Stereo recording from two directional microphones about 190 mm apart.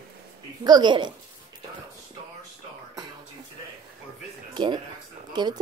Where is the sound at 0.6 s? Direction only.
20° right (ahead or behind).